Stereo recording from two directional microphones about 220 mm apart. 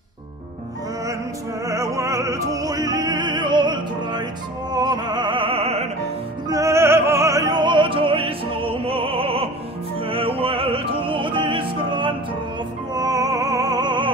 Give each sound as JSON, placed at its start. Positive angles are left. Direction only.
{"t": 1.7, "sound": "music", "side_deg": -15}
{"t": 6.5, "sound": "music", "side_deg": -15}
{"t": 10.0, "sound": "opera", "side_deg": -25}
{"t": 12.9, "sound": "music", "side_deg": -15}